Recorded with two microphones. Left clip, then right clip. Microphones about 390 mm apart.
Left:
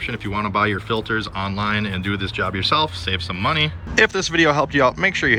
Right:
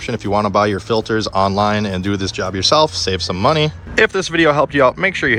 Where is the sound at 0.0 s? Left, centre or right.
Centre.